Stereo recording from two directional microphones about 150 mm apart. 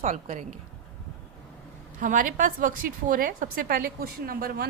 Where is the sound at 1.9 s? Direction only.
60° right (ahead or behind).